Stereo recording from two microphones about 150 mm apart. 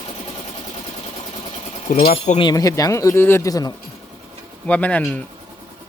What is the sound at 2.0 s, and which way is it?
Speech, 40° left (ahead or behind).